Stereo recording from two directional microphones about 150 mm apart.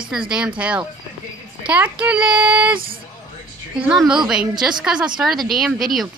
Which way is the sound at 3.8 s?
5° right (ahead or behind).